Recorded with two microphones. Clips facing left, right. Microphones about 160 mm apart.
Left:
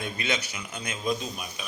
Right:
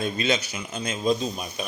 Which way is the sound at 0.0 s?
30° right (ahead or behind).